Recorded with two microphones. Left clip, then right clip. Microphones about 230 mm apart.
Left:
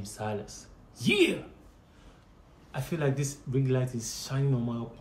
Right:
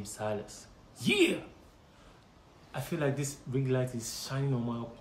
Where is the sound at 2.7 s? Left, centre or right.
Centre.